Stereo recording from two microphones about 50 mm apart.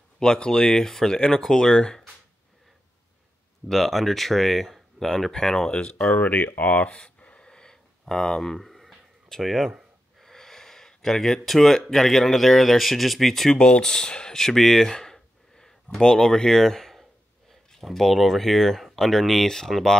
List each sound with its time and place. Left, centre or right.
0.2 s speech: centre
1.7 s speech: centre
3.6 s speech: centre; by 6.9 s left
7.2 s a sound: left
8.1 s speech: centre
10.1 s gasp: centre
11.8 s speech: centre